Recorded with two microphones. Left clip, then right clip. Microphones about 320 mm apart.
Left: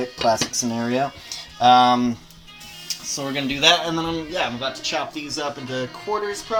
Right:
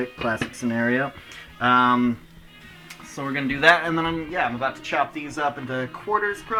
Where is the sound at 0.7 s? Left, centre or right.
Centre.